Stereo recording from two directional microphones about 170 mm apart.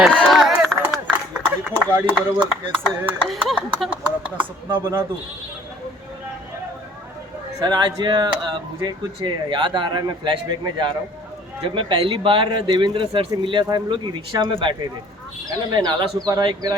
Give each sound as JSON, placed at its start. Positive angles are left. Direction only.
{"t": 0.0, "sound": "run", "side_deg": 5}
{"t": 1.7, "sound": "speech", "side_deg": -10}
{"t": 7.6, "sound": "a man's voice", "side_deg": -25}